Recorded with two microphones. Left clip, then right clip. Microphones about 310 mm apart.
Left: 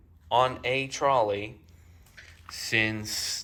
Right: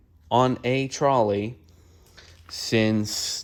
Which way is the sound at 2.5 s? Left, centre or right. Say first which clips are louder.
Right 3 dB; centre.